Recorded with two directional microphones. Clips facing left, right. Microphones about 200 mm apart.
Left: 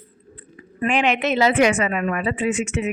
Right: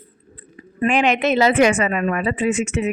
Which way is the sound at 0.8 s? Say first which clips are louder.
Right 3 dB; 45° right (ahead or behind).